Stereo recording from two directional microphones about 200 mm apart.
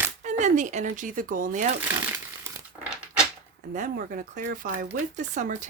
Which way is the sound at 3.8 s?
45° right (ahead or behind).